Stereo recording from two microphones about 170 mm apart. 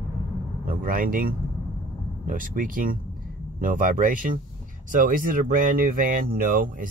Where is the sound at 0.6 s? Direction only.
55° right (ahead or behind).